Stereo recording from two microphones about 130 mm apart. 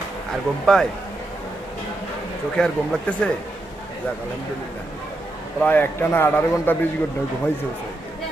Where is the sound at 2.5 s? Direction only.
10° left (ahead or behind).